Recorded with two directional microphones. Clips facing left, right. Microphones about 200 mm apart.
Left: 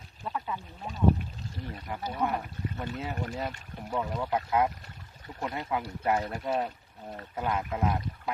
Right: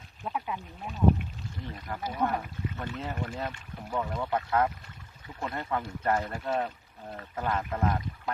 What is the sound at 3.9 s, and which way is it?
Speech, 10° left (ahead or behind).